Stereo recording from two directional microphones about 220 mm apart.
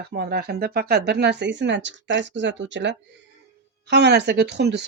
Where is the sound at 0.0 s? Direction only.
45° right (ahead or behind).